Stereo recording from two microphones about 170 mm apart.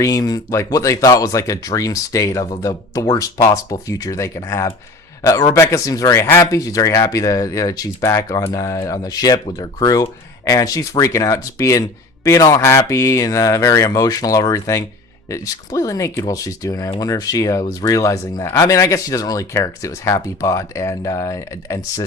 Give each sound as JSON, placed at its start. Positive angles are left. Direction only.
{"t": 0.0, "sound": "speech", "side_deg": 20}